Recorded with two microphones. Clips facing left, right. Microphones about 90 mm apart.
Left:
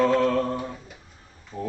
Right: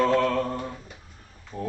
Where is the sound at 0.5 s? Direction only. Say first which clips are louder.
Left 1 dB; 10° left (ahead or behind).